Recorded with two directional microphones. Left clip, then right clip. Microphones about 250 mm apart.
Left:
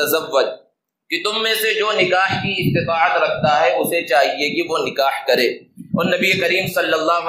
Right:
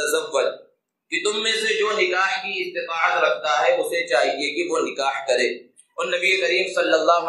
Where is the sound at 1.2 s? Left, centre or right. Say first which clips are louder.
Left 4 dB; left.